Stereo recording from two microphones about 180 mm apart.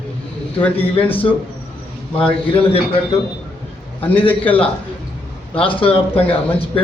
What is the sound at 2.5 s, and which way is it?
Speech, 35° left (ahead or behind).